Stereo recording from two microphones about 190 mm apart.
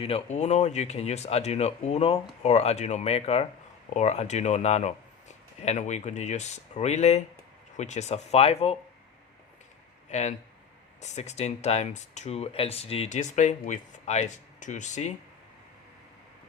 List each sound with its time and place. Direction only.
0.0 s speech: 35° left (ahead or behind)
10.1 s speech: 35° left (ahead or behind)